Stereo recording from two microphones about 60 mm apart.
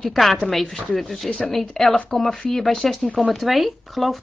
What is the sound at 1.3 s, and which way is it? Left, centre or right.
A woman's voice, centre.